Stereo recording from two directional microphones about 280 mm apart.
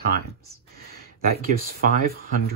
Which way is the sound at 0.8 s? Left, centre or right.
Right.